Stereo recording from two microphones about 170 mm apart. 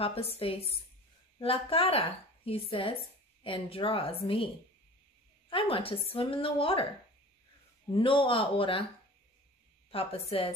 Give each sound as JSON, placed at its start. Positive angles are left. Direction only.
{"t": 0.0, "sound": "a woman's voice", "side_deg": 35}
{"t": 5.5, "sound": "a woman's voice", "side_deg": 30}
{"t": 7.9, "sound": "a woman's voice", "side_deg": 30}
{"t": 9.8, "sound": "a woman's voice", "side_deg": 35}